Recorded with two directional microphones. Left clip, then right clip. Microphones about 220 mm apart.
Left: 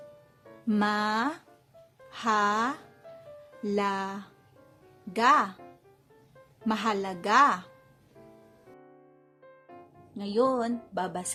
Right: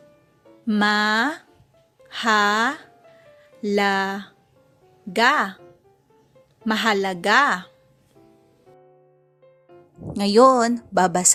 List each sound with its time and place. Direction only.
0.7 s a woman's voice: 20° right (ahead or behind)
6.7 s a woman's voice: 20° right (ahead or behind)
10.2 s a woman's voice: 40° right (ahead or behind)